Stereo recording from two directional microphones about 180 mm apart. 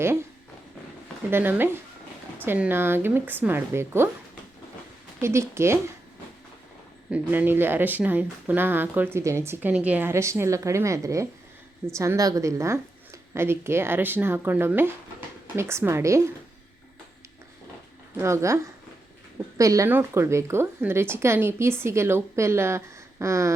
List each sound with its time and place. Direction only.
0.0 s speech: 15° right (ahead or behind)
1.3 s speech: 10° right (ahead or behind)
5.2 s speech: 15° right (ahead or behind)
7.1 s speech: 10° right (ahead or behind)
18.2 s speech: 15° right (ahead or behind)